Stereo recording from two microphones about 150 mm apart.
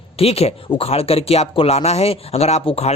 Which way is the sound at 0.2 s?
45° left (ahead or behind).